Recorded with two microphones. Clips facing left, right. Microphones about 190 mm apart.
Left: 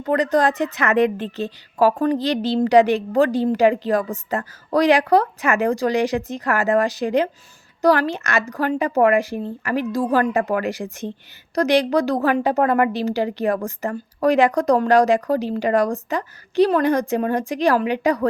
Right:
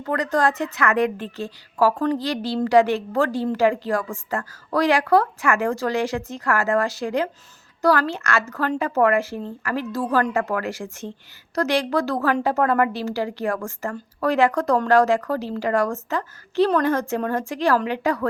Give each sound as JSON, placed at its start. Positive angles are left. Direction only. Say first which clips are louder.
{"t": 0.0, "sound": "a woman's voice", "louder": "left 3 dB", "side_deg": 20}